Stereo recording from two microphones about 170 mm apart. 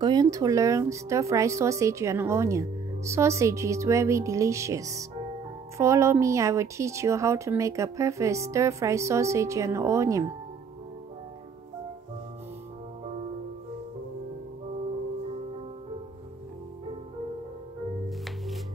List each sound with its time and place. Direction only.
0.0 s a woman's voice: 25° right (ahead or behind)